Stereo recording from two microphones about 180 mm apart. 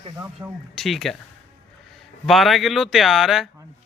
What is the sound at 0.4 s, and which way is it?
Speech, 20° right (ahead or behind).